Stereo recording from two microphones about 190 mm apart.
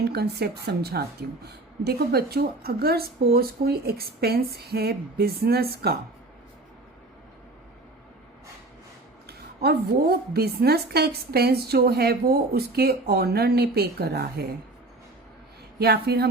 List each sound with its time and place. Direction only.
0.0 s a woman's voice: 55° right (ahead or behind)
9.2 s a woman's voice: 55° right (ahead or behind)
15.8 s a woman's voice: 55° right (ahead or behind)